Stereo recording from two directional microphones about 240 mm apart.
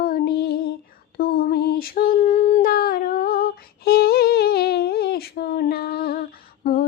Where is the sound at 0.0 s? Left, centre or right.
Left.